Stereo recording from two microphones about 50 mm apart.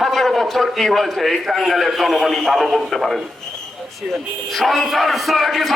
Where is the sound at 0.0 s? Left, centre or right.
Centre.